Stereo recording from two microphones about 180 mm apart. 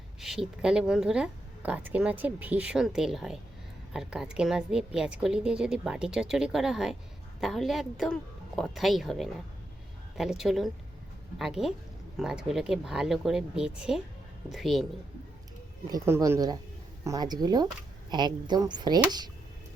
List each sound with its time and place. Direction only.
0.2 s speech: centre (ahead or behind)
15.9 s speech: 15° right (ahead or behind)